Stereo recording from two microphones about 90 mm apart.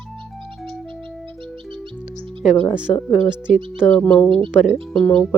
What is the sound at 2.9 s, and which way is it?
Speech, 45° left (ahead or behind).